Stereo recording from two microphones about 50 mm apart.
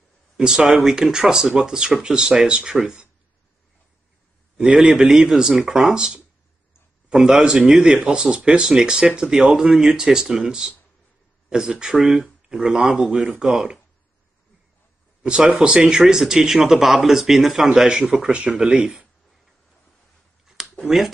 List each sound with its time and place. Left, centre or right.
0.4 s speech: centre
4.7 s speech: centre
7.1 s speech: centre
15.2 s speech: centre
20.4 s a sound: centre
20.8 s speech: centre